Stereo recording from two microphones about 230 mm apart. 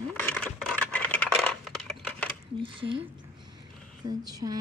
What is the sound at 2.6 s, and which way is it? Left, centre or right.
Speech, right.